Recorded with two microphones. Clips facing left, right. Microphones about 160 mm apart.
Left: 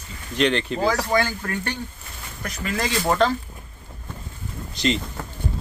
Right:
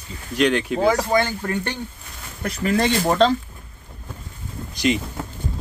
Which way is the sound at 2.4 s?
30° right (ahead or behind).